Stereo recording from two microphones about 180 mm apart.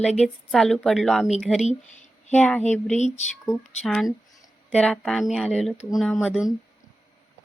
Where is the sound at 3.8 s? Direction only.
Centre (ahead or behind).